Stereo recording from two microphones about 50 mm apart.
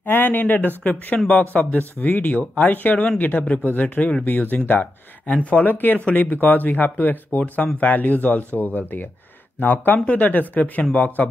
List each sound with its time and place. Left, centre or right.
0.0 s speech: left